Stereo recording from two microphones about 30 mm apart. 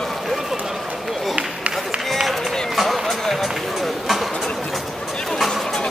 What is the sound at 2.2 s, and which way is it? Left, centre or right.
Run, centre.